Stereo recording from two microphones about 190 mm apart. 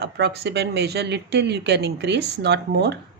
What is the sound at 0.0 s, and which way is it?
Speech, 60° right (ahead or behind).